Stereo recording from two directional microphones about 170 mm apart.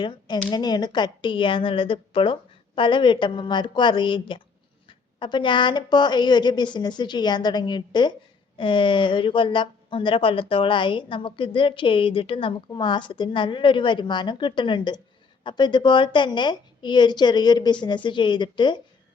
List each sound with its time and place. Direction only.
0.0 s speech: 25° left (ahead or behind)